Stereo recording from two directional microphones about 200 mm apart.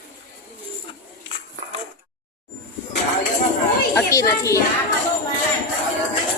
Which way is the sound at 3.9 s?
15° left (ahead or behind).